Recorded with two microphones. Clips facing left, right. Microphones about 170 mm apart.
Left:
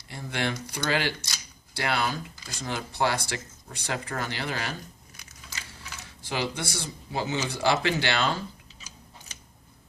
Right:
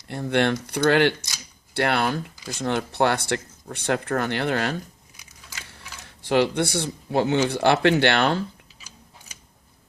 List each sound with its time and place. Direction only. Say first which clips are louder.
0.1 s speech: right 9 dB; 60° right (ahead or behind)
5.1 s a sound: even; 10° right (ahead or behind)
6.2 s speech: right 10 dB; 60° right (ahead or behind)